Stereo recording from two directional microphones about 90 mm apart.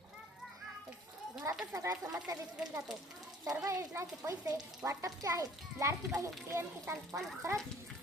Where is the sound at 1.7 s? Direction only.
40° right (ahead or behind).